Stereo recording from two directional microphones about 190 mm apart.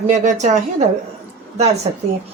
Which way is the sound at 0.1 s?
40° right (ahead or behind).